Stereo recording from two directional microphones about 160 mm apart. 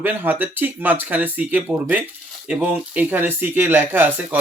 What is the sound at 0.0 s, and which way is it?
Speech, 10° right (ahead or behind).